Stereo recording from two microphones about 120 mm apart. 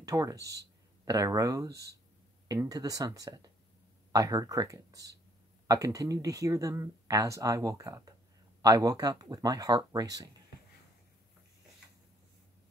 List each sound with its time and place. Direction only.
0.0 s speech: 30° right (ahead or behind)